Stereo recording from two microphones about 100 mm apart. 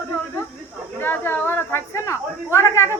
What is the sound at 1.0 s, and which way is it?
Speech, 20° left (ahead or behind).